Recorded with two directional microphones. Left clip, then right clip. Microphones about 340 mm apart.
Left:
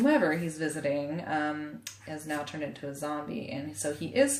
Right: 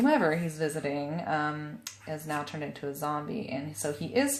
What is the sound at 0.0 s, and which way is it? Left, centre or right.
Speech, centre.